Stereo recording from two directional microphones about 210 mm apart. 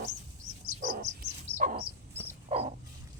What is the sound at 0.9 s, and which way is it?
Dog, 45° right (ahead or behind).